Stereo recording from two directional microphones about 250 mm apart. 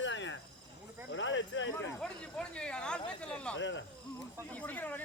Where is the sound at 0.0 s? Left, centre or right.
Left.